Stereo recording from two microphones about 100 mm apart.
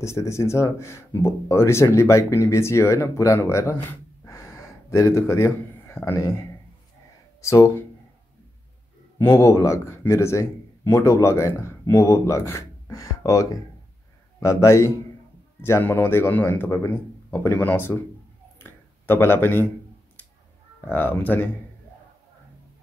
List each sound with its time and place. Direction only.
0.0 s speech: 30° left (ahead or behind)
3.3 s gasp: 30° left (ahead or behind)
7.4 s speech: 30° left (ahead or behind)
9.2 s speech: 25° left (ahead or behind)
18.6 s a sound: 25° left (ahead or behind)
20.8 s speech: 20° left (ahead or behind)